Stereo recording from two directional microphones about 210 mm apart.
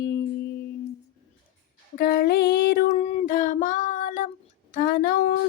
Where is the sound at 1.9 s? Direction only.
45° left (ahead or behind).